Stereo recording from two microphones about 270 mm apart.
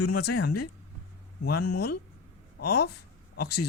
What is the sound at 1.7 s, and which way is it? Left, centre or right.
Speech, left.